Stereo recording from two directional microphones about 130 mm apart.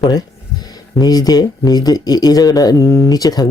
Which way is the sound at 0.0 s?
30° left (ahead or behind).